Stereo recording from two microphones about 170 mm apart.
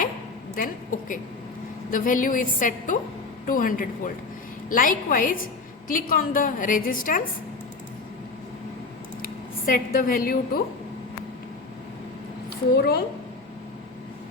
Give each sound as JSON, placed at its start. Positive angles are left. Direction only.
{"t": 0.5, "sound": "a woman's voice", "side_deg": 55}
{"t": 9.2, "sound": "speech", "side_deg": 55}
{"t": 12.7, "sound": "speech", "side_deg": 65}